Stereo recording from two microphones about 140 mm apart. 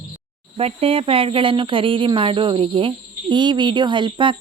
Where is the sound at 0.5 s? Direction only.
45° right (ahead or behind).